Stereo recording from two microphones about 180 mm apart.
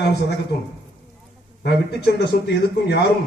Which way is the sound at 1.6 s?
70° left (ahead or behind).